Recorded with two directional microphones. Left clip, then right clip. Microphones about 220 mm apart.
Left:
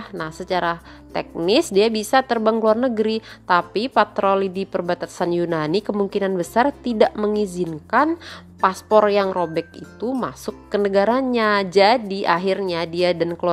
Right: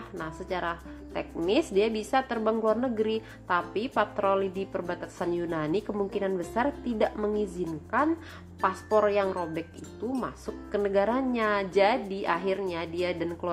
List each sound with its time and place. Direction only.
0.2 s speech: 45° left (ahead or behind)